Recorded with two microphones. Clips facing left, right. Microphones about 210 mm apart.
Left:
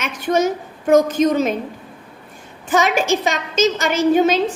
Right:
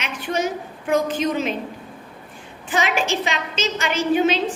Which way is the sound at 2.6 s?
45° left (ahead or behind).